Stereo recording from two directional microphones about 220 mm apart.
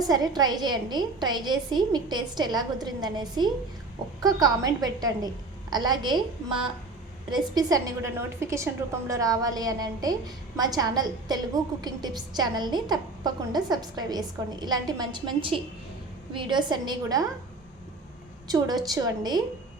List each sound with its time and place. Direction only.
0.0 s a woman's voice: 15° right (ahead or behind)
18.4 s a woman's voice: 15° right (ahead or behind)